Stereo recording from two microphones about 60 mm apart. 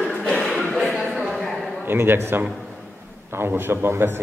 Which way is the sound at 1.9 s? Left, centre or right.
Right.